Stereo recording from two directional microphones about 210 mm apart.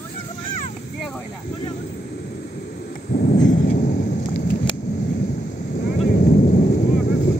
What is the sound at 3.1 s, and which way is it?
Thunder, 50° left (ahead or behind).